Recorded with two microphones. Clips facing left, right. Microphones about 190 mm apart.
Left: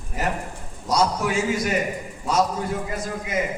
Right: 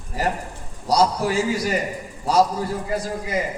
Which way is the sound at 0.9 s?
35° right (ahead or behind).